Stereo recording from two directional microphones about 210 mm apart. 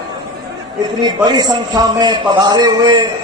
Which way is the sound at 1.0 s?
20° right (ahead or behind).